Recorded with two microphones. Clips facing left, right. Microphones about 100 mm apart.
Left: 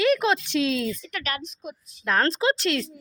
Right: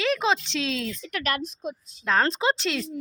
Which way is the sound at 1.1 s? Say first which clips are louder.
Right 3 dB; 50° right (ahead or behind).